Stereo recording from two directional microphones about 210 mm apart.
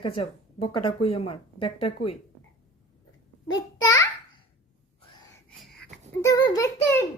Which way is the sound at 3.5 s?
20° left (ahead or behind).